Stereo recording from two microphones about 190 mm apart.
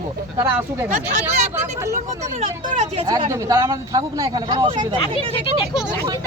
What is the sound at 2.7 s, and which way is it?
Speech, 30° right (ahead or behind).